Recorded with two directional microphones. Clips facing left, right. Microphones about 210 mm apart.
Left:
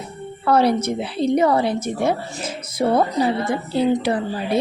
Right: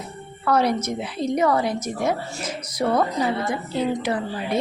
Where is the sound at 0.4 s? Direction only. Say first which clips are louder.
Left 4 dB; 30° left (ahead or behind).